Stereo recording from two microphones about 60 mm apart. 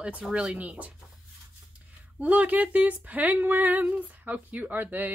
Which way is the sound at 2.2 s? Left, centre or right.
Right.